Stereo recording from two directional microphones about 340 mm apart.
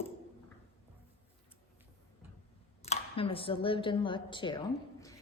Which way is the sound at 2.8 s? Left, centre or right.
Centre.